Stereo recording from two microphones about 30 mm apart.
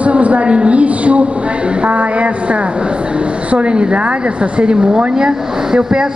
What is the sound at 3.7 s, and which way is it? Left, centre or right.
A woman's voice, right.